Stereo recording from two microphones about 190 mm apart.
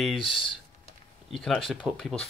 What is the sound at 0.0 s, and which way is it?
Speech, centre (ahead or behind).